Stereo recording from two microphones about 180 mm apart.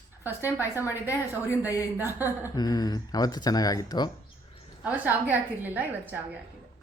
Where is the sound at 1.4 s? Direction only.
15° left (ahead or behind).